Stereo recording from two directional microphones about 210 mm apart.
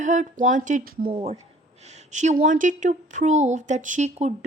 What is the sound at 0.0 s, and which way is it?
A woman's voice, 35° right (ahead or behind).